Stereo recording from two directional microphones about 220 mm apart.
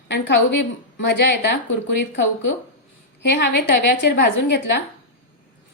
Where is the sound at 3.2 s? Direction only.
50° left (ahead or behind).